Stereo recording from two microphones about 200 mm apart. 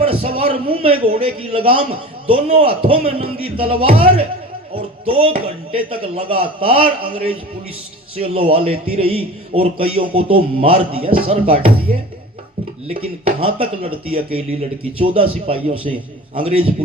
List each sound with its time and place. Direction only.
0.0 s a man's voice: 30° right (ahead or behind)
12.9 s a man's voice: 30° right (ahead or behind)